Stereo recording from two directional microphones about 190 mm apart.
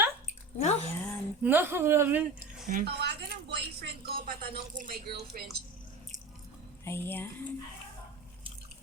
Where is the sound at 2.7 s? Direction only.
50° right (ahead or behind).